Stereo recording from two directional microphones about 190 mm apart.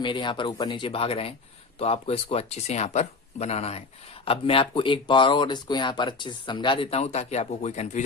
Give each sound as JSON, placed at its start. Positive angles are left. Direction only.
{"t": 0.0, "sound": "speech", "side_deg": 25}